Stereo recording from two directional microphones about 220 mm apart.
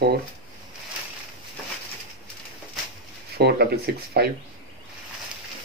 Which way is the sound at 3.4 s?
50° right (ahead or behind).